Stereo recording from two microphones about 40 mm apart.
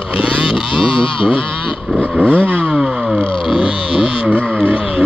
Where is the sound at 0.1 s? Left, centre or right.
Right.